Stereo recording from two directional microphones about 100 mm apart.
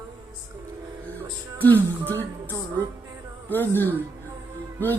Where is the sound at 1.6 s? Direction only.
20° left (ahead or behind).